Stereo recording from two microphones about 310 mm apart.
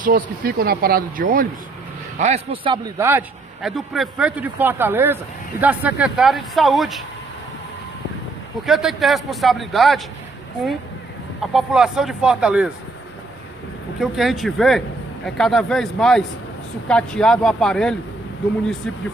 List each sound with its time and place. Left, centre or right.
0.0 s a man's voice: right; by 7.0 s centre
8.6 s a man's voice: centre
11.5 s a man's voice: centre
13.9 s a man's voice: centre